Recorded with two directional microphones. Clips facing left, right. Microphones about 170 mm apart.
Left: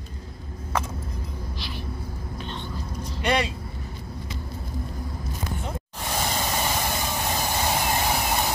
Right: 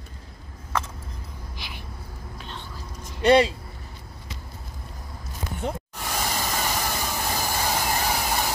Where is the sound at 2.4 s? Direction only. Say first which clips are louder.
Left 4 dB; 5° right (ahead or behind).